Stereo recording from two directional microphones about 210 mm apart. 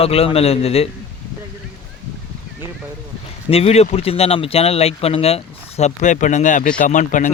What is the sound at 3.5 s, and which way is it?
Speech, 30° left (ahead or behind).